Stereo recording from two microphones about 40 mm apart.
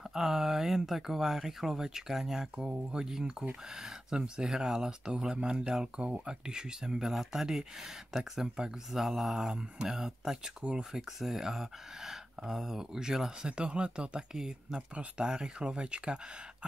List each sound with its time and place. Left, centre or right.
0.1 s speech: centre
13.5 s speech: right